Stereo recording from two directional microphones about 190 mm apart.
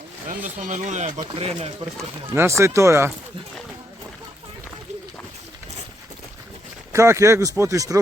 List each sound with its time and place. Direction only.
0.4 s speech: 40° right (ahead or behind)
2.3 s speech: 15° right (ahead or behind)
6.9 s speech: 15° right (ahead or behind)